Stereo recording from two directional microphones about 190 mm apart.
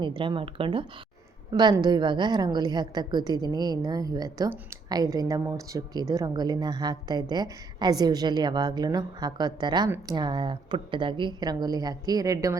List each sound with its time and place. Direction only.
0.0 s a woman's voice: 25° right (ahead or behind)